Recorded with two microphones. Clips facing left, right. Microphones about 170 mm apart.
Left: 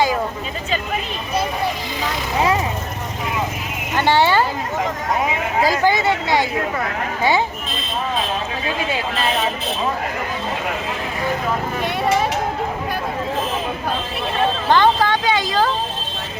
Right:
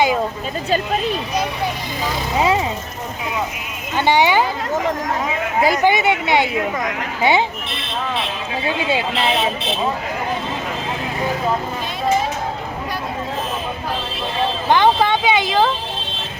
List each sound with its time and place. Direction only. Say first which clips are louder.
3.9 s speech: right 1 dB; 15° right (ahead or behind)
5.6 s speech: right 2 dB; 20° right (ahead or behind)
7.7 s speech: left 1 dB; 75° right (ahead or behind)
14.7 s a sound: right 2 dB; 20° right (ahead or behind)